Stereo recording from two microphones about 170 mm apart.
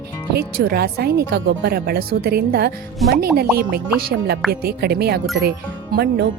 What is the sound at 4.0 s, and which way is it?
Speech, 65° right (ahead or behind).